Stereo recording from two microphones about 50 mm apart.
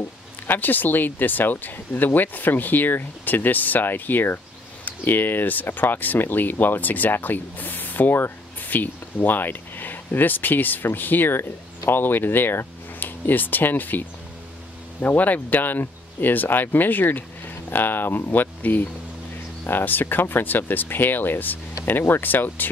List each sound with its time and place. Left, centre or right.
0.5 s speech: left